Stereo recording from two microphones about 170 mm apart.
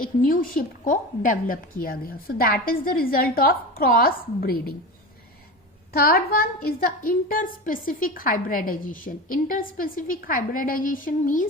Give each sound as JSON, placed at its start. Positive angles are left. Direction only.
{"t": 0.2, "sound": "a woman's voice", "side_deg": 55}
{"t": 5.9, "sound": "a woman's voice", "side_deg": 60}